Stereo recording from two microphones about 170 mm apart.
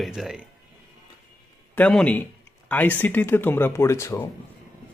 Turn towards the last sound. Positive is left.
turn(degrees=15)  # may be behind; listen again after turning